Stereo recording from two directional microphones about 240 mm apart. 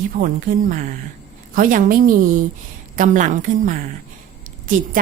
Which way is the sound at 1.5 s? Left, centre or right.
Right.